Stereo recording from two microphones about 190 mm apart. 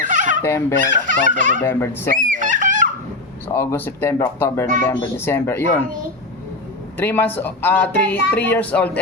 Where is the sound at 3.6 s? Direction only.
10° left (ahead or behind).